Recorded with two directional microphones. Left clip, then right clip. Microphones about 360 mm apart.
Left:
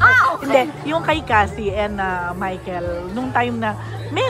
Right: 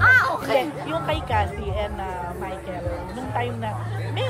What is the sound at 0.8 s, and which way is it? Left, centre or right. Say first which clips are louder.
A woman's voice: left 6 dB; left.